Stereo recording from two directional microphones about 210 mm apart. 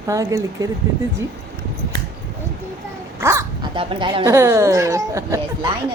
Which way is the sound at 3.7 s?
25° right (ahead or behind).